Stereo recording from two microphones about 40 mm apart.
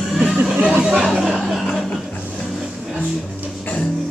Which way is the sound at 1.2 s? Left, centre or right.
Centre.